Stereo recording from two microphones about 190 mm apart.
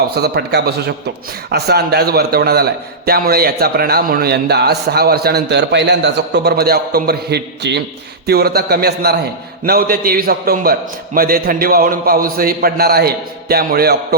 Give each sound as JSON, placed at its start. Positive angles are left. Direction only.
{"t": 0.1, "sound": "a man's voice", "side_deg": -60}